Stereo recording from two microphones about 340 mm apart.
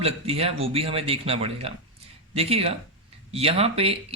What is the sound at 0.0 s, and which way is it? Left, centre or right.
Speech, centre.